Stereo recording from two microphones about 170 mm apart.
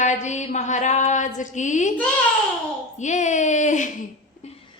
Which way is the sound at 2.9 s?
45° left (ahead or behind).